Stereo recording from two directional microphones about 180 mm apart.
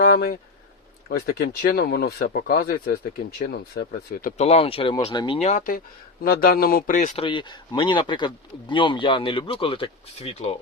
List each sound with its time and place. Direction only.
0.0 s a sound: 60° left (ahead or behind)
1.0 s speech: 60° left (ahead or behind)
4.4 s speech: 35° left (ahead or behind)
6.2 s speech: 55° left (ahead or behind)
7.2 s a man's voice: 25° left (ahead or behind)